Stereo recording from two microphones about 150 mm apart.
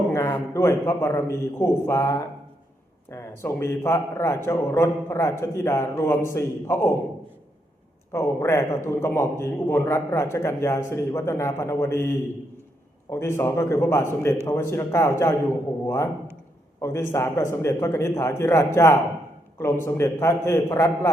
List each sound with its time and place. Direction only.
0.1 s a sound: 15° left (ahead or behind)
0.5 s a man's voice: 20° left (ahead or behind)
8.1 s a man's voice: 20° left (ahead or behind)
13.1 s a man's voice: 15° left (ahead or behind)